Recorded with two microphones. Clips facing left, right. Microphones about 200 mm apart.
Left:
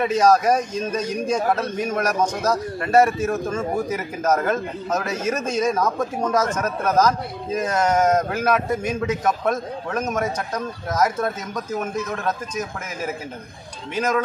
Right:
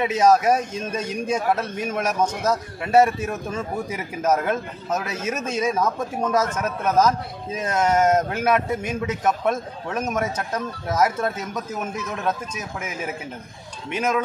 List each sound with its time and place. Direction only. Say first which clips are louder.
0.0 s a man's voice: left 1 dB; 5° right (ahead or behind)